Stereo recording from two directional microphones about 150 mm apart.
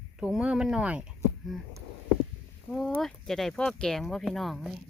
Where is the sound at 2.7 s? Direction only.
Centre (ahead or behind).